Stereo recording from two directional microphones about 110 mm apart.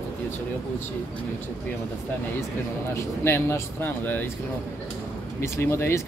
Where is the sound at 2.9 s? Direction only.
25° left (ahead or behind).